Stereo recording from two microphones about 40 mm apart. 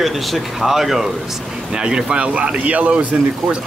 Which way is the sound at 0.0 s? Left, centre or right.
Centre.